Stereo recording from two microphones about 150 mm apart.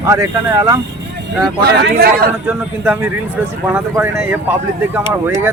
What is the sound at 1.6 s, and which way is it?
Speech, 90° right.